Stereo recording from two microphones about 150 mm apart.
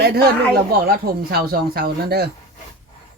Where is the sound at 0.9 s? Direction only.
85° right.